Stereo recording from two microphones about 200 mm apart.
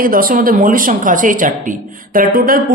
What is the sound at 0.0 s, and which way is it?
Speech, 45° right (ahead or behind).